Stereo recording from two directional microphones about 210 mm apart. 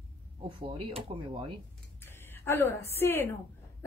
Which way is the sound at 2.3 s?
10° left (ahead or behind).